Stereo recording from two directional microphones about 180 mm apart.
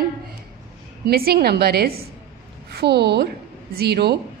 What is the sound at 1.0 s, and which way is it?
A woman's voice, 60° right (ahead or behind).